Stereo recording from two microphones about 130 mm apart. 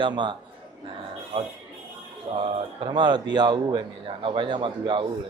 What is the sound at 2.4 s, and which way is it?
A man's voice, 40° right (ahead or behind).